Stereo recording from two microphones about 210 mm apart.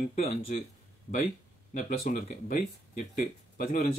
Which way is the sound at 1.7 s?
35° left (ahead or behind).